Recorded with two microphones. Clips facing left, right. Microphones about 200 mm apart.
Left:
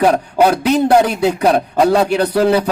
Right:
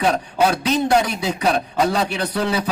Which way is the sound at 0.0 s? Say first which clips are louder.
Left 6 dB; 60° left (ahead or behind).